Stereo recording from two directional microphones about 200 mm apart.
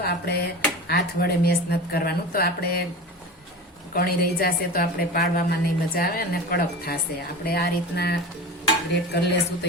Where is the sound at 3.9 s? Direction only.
50° left (ahead or behind).